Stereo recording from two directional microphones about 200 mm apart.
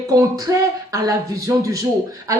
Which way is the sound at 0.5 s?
15° right (ahead or behind).